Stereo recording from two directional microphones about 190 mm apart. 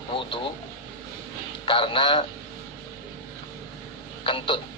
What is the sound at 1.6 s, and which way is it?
Speech, 25° left (ahead or behind).